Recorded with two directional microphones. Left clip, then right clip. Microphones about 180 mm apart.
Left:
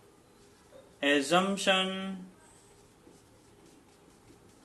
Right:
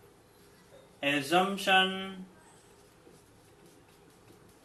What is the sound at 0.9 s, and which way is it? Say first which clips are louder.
Speech: left 1 dB; 60° left (ahead or behind).